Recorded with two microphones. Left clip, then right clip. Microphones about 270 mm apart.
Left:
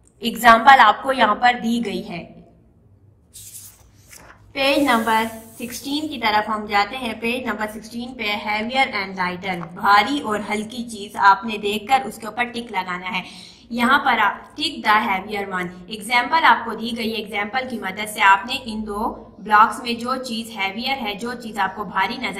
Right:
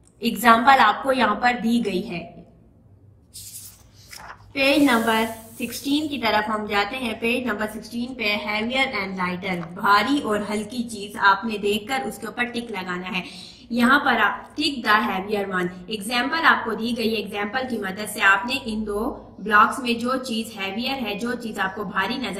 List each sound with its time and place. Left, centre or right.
0.2 s a woman's voice: left
4.6 s a woman's voice: left